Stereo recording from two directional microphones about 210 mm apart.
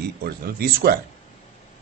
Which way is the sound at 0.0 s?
50° right (ahead or behind).